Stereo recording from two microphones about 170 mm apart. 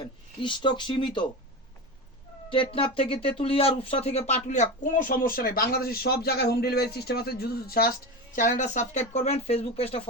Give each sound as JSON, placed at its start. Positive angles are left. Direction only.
{"t": 0.4, "sound": "speech", "side_deg": 30}
{"t": 2.5, "sound": "speech", "side_deg": 30}
{"t": 8.4, "sound": "speech", "side_deg": 45}